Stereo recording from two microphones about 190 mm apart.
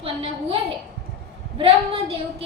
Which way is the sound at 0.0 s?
30° right (ahead or behind).